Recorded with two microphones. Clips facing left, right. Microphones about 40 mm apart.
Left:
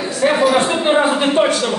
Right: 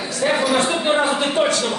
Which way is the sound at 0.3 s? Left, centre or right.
Centre.